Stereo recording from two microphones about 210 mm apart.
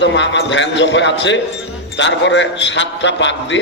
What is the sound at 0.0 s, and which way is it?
A man's voice, 60° left (ahead or behind).